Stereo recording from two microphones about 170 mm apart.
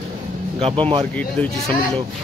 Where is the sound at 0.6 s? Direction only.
30° right (ahead or behind).